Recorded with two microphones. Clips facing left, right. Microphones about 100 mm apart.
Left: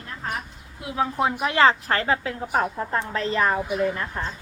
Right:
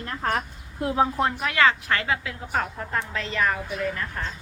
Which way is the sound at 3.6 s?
20° left (ahead or behind).